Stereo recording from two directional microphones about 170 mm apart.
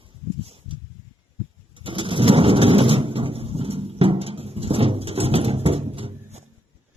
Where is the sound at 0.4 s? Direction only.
35° right (ahead or behind).